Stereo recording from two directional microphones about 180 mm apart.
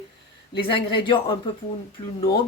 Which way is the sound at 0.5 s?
30° left (ahead or behind).